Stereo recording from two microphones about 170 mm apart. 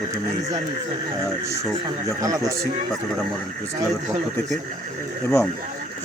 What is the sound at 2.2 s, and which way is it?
Speech, 20° right (ahead or behind).